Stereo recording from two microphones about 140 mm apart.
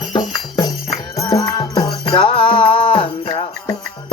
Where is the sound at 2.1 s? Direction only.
35° left (ahead or behind).